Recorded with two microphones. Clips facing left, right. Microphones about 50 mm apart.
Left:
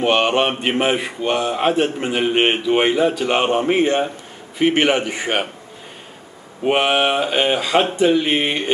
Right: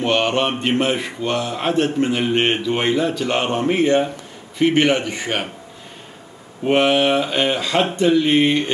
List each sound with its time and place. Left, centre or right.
0.0 s speech: centre
6.6 s speech: centre